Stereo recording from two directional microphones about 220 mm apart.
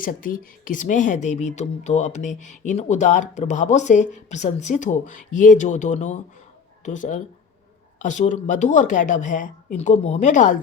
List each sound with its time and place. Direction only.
0.0 s speech: 40° left (ahead or behind)